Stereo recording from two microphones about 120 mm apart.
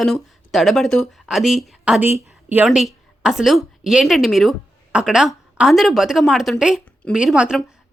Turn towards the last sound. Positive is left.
turn(degrees=-5)  # may be behind; listen again after turning